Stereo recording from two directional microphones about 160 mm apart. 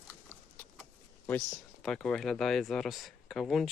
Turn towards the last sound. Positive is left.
turn(degrees=0)  # may be behind; listen again after turning